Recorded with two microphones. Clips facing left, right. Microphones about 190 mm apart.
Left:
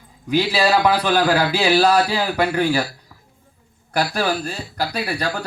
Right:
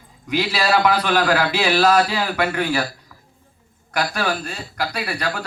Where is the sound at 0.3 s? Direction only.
30° left (ahead or behind).